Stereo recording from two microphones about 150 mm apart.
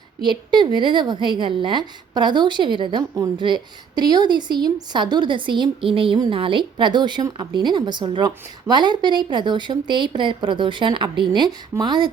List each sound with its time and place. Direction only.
0.2 s a woman's voice: 30° right (ahead or behind)